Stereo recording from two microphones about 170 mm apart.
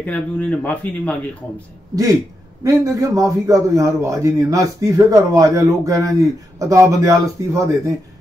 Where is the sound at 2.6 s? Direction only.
20° right (ahead or behind).